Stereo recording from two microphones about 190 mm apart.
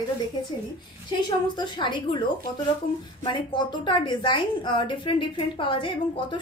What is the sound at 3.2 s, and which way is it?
A woman's voice, 25° left (ahead or behind).